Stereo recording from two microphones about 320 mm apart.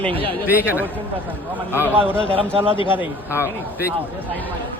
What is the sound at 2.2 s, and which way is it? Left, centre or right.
Speech, centre.